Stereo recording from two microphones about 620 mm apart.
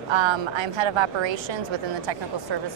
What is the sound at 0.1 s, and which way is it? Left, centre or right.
Speech, right.